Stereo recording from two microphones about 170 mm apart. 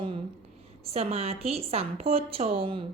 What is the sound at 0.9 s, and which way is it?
A woman's voice, 40° right (ahead or behind).